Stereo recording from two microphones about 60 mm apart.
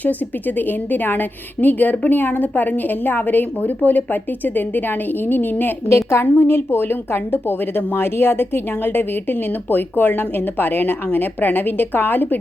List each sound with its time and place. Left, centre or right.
0.0 s speech: left
5.9 s a woman's voice: left
6.3 s speech: left